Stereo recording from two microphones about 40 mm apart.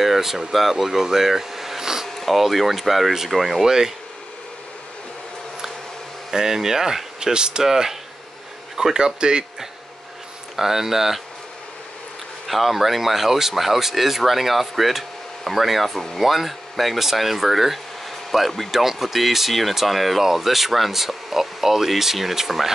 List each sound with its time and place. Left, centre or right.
0.0 s a sound: centre
0.5 s speech: centre
2.0 s speech: centre
3.6 s speech: centre
6.3 s speech: centre
12.4 s speech: centre